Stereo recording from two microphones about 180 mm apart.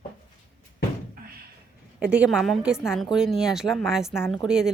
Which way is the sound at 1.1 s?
55° right (ahead or behind).